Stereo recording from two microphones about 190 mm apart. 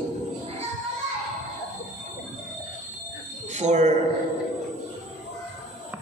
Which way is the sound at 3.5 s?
40° right (ahead or behind).